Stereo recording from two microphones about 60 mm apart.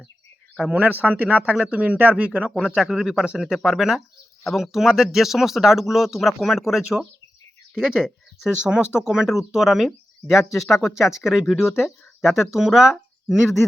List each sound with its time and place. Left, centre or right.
0.7 s speech: right
2.5 s speech: centre
12.2 s speech: centre